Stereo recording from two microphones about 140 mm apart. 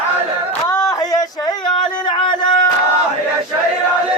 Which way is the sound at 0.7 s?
25° left (ahead or behind).